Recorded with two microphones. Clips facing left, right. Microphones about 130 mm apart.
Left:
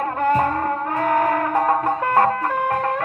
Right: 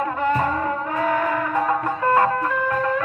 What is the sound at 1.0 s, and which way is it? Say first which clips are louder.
Music: left 3 dB; 50° left (ahead or behind).